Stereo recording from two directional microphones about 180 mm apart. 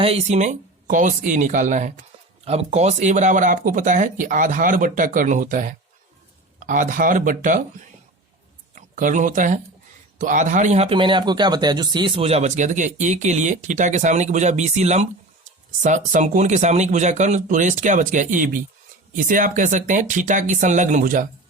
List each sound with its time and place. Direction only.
0.0 s speech: 35° right (ahead or behind)
8.7 s a man's voice: 45° right (ahead or behind)